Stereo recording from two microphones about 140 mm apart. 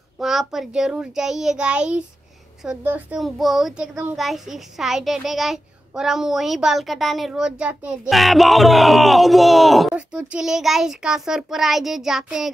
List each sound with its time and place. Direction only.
0.2 s a woman's voice: centre (ahead or behind)
3.9 s a woman's voice: 15° right (ahead or behind)
4.2 s speech: centre (ahead or behind)